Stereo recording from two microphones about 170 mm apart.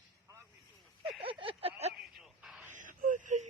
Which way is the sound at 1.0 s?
30° right (ahead or behind).